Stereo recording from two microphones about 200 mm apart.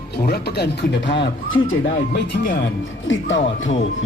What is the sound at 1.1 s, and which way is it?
Speech, 25° left (ahead or behind).